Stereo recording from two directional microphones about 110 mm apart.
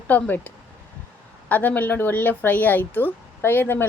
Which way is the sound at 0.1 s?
15° left (ahead or behind).